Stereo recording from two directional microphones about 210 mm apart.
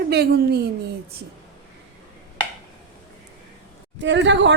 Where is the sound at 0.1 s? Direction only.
50° right (ahead or behind).